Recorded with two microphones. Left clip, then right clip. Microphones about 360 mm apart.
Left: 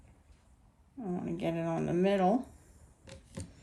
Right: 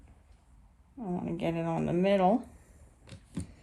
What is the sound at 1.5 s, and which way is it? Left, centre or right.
Speech, centre.